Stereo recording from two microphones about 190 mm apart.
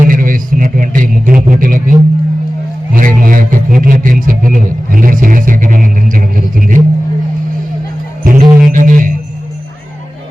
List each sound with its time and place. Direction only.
0.0 s music: 45° right (ahead or behind)
2.9 s speech: 45° right (ahead or behind)
8.2 s music: 45° right (ahead or behind)